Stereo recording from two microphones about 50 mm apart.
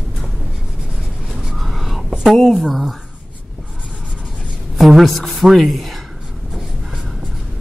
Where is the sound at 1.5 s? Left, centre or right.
Centre.